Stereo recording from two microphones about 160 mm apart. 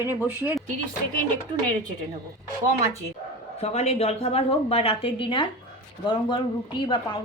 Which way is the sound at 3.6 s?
40° left (ahead or behind).